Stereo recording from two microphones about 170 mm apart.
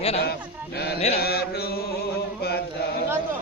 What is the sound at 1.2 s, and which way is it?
Mantra, 65° left (ahead or behind).